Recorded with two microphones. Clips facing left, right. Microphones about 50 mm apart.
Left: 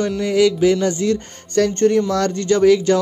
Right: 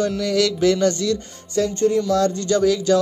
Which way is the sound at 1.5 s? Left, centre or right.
Left.